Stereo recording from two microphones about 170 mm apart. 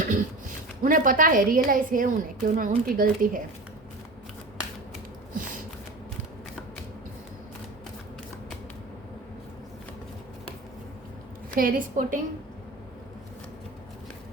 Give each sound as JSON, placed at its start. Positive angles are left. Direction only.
{"t": 0.0, "sound": "a woman's voice", "side_deg": -50}
{"t": 11.5, "sound": "a woman's voice", "side_deg": -55}